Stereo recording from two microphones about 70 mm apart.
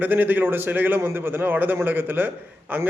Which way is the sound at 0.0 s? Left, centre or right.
Right.